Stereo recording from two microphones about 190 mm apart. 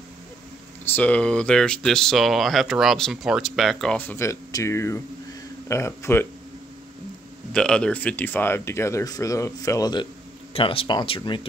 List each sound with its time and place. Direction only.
0.8 s speech: 10° left (ahead or behind)
7.5 s speech: 5° left (ahead or behind); by 11.4 s 25° left (ahead or behind)